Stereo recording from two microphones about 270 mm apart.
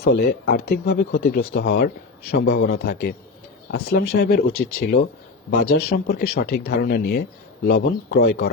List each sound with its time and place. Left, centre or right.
0.1 s speech: left